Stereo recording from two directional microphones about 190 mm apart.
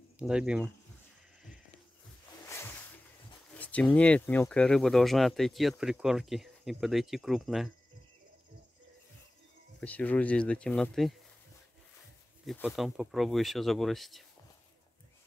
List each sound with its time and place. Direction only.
0.2 s speech: 5° right (ahead or behind)
3.5 s speech: 10° left (ahead or behind)
9.8 s speech: 10° left (ahead or behind)
12.4 s speech: centre (ahead or behind)